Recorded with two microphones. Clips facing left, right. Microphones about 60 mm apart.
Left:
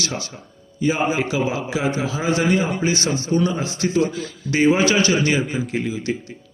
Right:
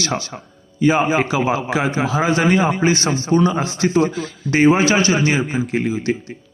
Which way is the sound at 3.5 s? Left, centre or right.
Right.